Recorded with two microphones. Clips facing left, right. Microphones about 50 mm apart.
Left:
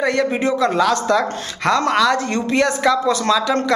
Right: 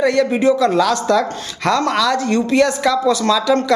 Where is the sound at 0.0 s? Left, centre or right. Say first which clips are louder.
Right 4 dB; centre.